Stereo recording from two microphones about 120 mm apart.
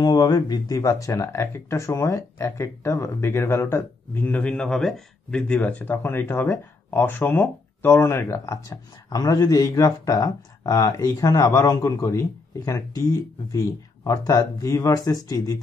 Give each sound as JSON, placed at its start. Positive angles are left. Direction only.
{"t": 0.0, "sound": "speech", "side_deg": 35}